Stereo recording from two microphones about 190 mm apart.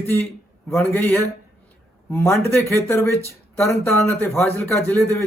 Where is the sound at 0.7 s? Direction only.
10° left (ahead or behind).